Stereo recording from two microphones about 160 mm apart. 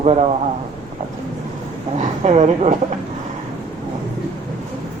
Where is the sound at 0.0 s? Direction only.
40° right (ahead or behind).